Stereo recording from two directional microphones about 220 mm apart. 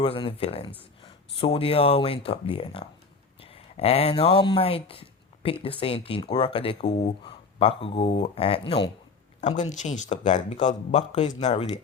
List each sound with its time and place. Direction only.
0.0 s speech: 20° left (ahead or behind)